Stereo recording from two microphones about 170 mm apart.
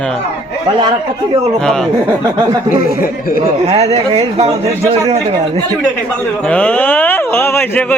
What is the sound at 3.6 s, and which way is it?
A man's voice, 35° right (ahead or behind).